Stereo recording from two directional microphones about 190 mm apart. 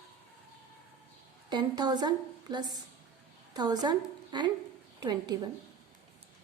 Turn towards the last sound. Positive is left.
turn(degrees=-20)  # may be behind; listen again after turning